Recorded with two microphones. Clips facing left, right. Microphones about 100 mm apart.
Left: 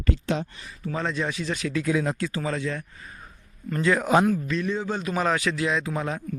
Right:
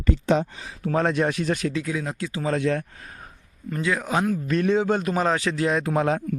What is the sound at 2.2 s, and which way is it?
Speech, 15° right (ahead or behind).